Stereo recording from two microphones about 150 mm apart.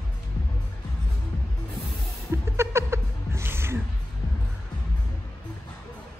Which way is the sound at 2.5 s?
15° right (ahead or behind).